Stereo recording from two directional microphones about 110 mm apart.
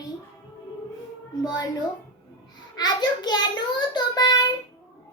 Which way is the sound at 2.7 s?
40° left (ahead or behind).